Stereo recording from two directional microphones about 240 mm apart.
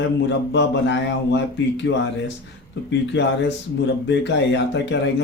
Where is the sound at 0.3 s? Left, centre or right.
Left.